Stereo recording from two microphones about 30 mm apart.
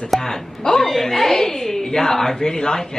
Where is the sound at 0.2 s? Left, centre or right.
Centre.